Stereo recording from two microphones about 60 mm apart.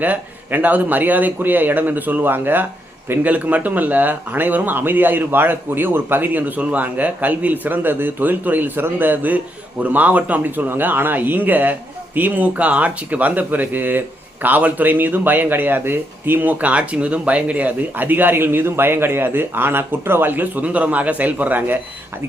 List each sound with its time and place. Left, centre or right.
0.0 s speech: right